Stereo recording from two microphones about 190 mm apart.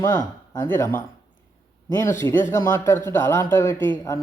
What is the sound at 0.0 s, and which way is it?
Speech, 20° left (ahead or behind).